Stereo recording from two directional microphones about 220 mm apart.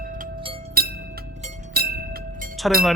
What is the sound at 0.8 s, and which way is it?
Music, 45° right (ahead or behind).